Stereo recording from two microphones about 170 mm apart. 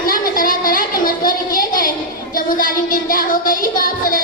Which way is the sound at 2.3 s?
55° left (ahead or behind).